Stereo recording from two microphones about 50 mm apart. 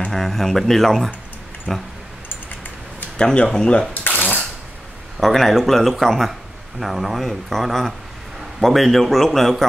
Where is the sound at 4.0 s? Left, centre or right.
Left.